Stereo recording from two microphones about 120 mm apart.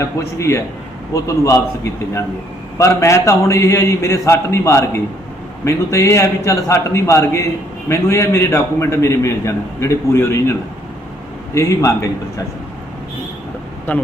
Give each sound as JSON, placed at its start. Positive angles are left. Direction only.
{"t": 0.0, "sound": "a man's voice", "side_deg": 25}
{"t": 11.5, "sound": "a man's voice", "side_deg": 25}
{"t": 13.9, "sound": "a man's voice", "side_deg": 15}